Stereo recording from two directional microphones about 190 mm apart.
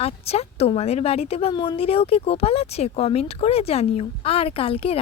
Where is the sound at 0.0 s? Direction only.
30° left (ahead or behind).